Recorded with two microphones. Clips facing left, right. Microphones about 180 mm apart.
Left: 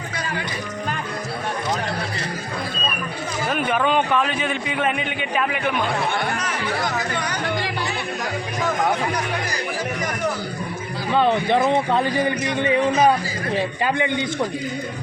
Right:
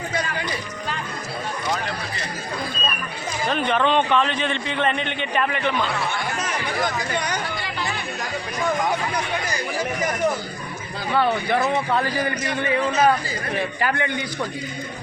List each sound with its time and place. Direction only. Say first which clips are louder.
3.4 s a man's voice: right 1 dB; 5° left (ahead or behind)
11.1 s speech: left 3 dB; 20° left (ahead or behind)